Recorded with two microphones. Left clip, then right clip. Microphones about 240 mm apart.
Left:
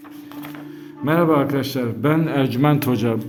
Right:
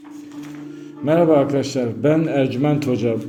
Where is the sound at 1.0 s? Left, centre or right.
Centre.